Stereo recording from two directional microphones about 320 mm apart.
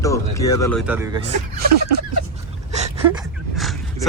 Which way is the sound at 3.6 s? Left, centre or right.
Centre.